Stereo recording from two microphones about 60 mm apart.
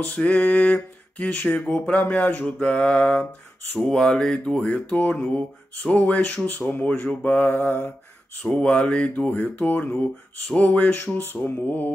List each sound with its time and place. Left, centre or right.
0.0 s speech: left
8.4 s speech: centre